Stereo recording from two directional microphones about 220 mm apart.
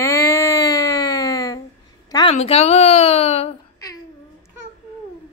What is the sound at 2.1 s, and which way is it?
A woman's voice, 25° left (ahead or behind).